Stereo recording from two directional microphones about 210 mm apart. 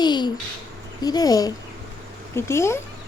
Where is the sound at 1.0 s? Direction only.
20° left (ahead or behind).